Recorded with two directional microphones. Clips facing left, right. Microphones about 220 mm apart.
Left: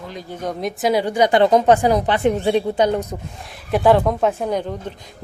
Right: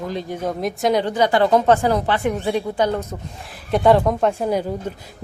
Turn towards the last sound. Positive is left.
turn(degrees=-10)  # may be behind; listen again after turning